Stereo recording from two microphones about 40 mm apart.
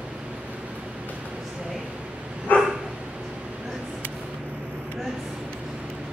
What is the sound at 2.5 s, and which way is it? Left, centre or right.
Dog, left.